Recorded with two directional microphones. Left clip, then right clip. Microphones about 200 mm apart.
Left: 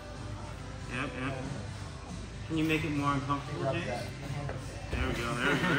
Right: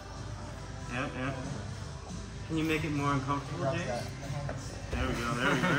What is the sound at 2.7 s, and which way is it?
A man's voice, 50° right (ahead or behind).